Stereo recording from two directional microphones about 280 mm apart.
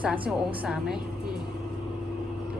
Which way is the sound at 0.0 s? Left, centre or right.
Centre.